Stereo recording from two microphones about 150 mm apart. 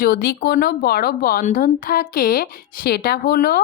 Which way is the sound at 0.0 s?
85° left.